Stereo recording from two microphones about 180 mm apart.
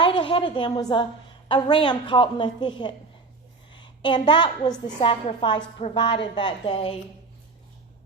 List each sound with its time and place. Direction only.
0.0 s a woman's voice: 25° left (ahead or behind)